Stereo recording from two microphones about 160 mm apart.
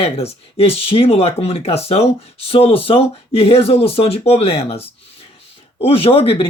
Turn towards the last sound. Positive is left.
turn(degrees=35)  # may be behind; listen again after turning